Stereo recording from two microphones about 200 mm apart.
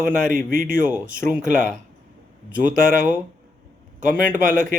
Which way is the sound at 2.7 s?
40° right (ahead or behind).